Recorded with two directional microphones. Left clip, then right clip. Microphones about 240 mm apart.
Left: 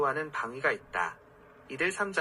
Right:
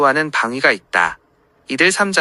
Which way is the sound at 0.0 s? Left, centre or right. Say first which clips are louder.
Right 15 dB; right.